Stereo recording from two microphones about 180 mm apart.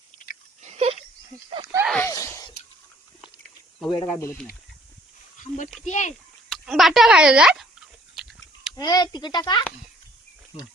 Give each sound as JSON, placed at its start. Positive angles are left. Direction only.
{"t": 0.6, "sound": "a sound", "side_deg": -35}
{"t": 1.9, "sound": "a sound", "side_deg": 15}
{"t": 3.8, "sound": "speech", "side_deg": 0}
{"t": 5.8, "sound": "speech", "side_deg": 40}
{"t": 6.5, "sound": "speech", "side_deg": 0}
{"t": 8.2, "sound": "sheep", "side_deg": 0}
{"t": 8.7, "sound": "speech", "side_deg": 20}